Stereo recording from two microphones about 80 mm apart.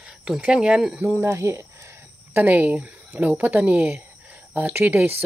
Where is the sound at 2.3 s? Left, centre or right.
Right.